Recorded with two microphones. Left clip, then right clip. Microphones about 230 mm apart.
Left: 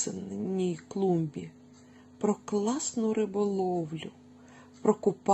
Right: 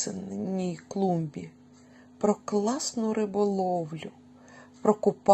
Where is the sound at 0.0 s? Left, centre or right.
Right.